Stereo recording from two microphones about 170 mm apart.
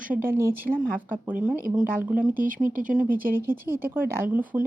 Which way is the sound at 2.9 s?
10° right (ahead or behind).